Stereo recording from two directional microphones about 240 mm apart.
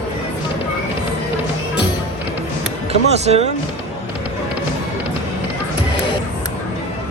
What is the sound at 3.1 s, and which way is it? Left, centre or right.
Speech, right.